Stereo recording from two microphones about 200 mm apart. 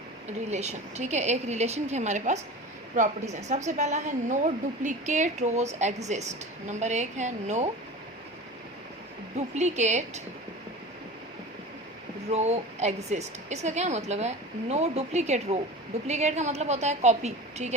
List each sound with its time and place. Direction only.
0.5 s a woman's voice: 35° right (ahead or behind)
9.6 s a woman's voice: 35° right (ahead or behind)
12.3 s a woman's voice: 35° right (ahead or behind)